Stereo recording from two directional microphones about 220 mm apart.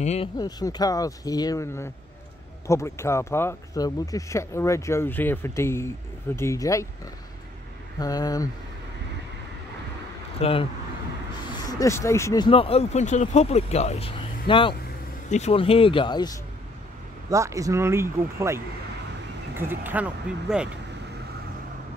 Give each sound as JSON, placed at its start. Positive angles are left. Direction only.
{"t": 0.0, "sound": "speech", "side_deg": 30}
{"t": 0.4, "sound": "speech", "side_deg": 15}
{"t": 8.0, "sound": "speech", "side_deg": 15}
{"t": 10.4, "sound": "speech", "side_deg": 25}
{"t": 11.6, "sound": "speech", "side_deg": 15}
{"t": 12.4, "sound": "speech", "side_deg": 25}
{"t": 17.3, "sound": "speech", "side_deg": -15}
{"t": 19.7, "sound": "speech", "side_deg": -10}